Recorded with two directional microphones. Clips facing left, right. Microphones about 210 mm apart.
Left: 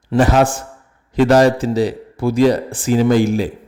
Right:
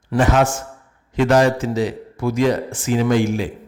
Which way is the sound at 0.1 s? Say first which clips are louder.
Left 3 dB; 35° left (ahead or behind).